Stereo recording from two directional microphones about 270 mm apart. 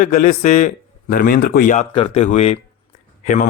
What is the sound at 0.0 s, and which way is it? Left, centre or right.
A man's voice, left.